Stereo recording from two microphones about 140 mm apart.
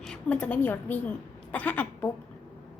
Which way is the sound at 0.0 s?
5° left (ahead or behind).